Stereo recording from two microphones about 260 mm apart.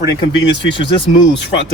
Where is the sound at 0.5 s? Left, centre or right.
Left.